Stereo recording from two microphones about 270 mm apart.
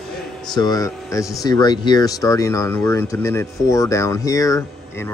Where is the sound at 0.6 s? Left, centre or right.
Centre.